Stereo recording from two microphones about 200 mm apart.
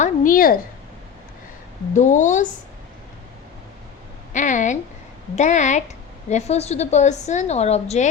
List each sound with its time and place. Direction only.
0.0 s a sound: 45° left (ahead or behind)
1.9 s a woman's voice: 40° left (ahead or behind)
4.3 s a woman's voice: 40° left (ahead or behind)